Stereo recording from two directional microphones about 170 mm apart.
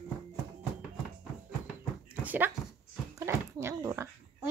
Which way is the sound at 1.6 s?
10° right (ahead or behind).